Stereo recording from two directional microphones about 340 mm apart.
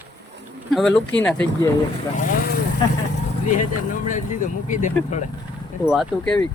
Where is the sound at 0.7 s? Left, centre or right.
Centre.